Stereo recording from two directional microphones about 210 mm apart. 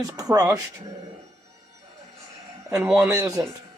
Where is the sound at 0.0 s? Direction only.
15° right (ahead or behind).